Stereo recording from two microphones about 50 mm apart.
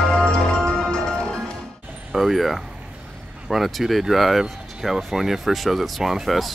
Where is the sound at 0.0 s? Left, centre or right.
Centre.